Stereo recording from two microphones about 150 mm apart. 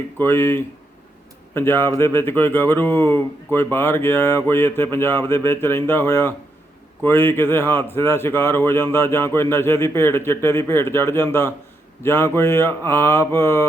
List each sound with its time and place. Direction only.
0.2 s speech: 15° left (ahead or behind)